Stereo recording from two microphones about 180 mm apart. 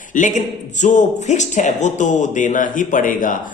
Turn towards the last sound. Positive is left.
turn(degrees=50)  # may be behind; listen again after turning